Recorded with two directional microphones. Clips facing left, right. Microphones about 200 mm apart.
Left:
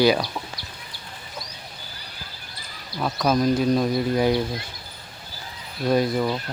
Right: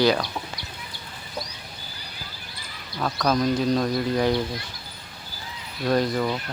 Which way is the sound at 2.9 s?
5° left (ahead or behind).